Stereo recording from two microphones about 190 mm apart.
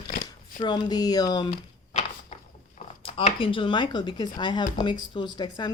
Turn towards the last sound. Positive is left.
turn(degrees=25)  # may be behind; listen again after turning